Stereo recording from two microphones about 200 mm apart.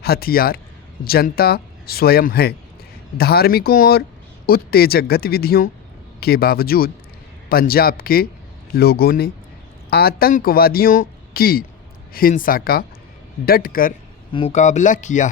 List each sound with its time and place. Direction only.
0.0 s speech: 50° left (ahead or behind)
14.3 s speech: 30° left (ahead or behind)